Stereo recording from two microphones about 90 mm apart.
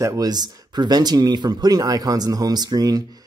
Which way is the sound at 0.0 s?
45° right (ahead or behind).